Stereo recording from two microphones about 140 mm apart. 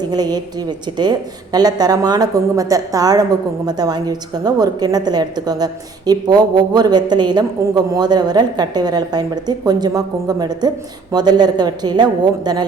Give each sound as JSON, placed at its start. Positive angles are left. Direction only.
{"t": 0.0, "sound": "a woman's voice", "side_deg": -30}
{"t": 1.5, "sound": "a woman's voice", "side_deg": -30}